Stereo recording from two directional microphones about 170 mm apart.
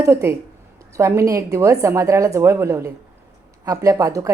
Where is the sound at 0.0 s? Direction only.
15° right (ahead or behind).